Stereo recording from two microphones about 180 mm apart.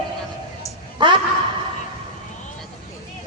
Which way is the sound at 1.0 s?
25° right (ahead or behind).